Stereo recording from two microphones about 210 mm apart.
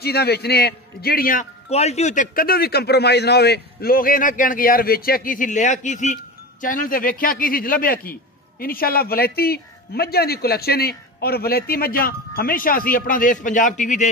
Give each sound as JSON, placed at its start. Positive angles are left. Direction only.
{"t": 0.0, "sound": "speech", "side_deg": 50}